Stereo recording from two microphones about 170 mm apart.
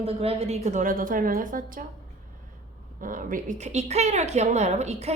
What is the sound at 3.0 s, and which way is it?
A woman's voice, 50° right (ahead or behind).